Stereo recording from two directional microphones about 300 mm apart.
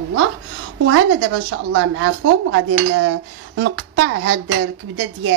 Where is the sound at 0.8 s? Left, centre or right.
Right.